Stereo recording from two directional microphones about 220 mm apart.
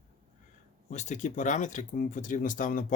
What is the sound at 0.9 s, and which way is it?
Speech, 30° left (ahead or behind).